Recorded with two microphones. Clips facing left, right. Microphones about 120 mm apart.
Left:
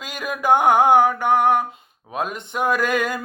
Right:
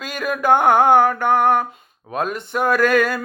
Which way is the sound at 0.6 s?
15° left (ahead or behind).